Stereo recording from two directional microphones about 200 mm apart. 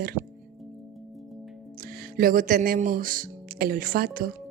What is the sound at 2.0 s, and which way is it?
Speech, 45° right (ahead or behind).